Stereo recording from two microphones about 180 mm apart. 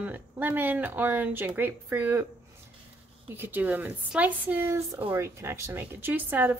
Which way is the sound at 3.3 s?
10° right (ahead or behind).